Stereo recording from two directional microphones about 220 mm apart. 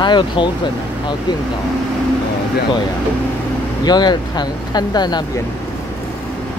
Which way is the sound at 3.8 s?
20° left (ahead or behind).